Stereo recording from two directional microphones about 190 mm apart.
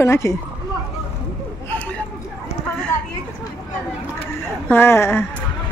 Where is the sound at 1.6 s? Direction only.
10° left (ahead or behind).